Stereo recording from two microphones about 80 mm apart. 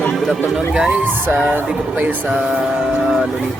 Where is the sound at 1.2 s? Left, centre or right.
Right.